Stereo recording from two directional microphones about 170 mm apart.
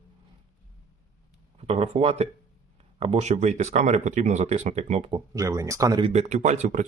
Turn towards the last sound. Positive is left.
turn(degrees=-45)  # may be behind; listen again after turning